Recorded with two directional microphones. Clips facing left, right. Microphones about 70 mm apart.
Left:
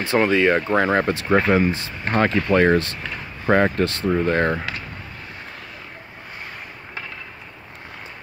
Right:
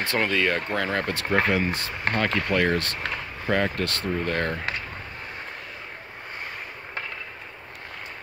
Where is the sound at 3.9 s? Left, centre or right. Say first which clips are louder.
Left 7 dB; left.